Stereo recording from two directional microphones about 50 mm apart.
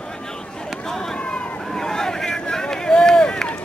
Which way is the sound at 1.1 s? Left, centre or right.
Centre.